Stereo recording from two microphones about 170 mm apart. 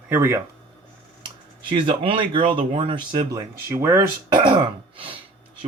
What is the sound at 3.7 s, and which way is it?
Speech, 15° right (ahead or behind).